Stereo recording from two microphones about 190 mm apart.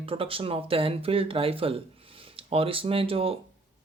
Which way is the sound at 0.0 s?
30° right (ahead or behind).